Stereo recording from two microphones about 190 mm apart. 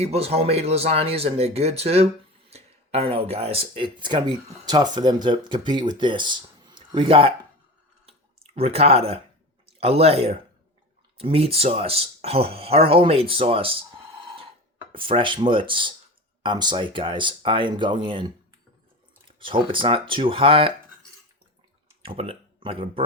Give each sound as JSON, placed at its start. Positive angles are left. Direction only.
{"t": 0.0, "sound": "speech", "side_deg": -35}
{"t": 8.0, "sound": "clicking", "side_deg": -30}
{"t": 9.6, "sound": "speech", "side_deg": -30}
{"t": 14.9, "sound": "speech", "side_deg": -25}
{"t": 19.4, "sound": "speech", "side_deg": -25}
{"t": 22.0, "sound": "speech", "side_deg": -30}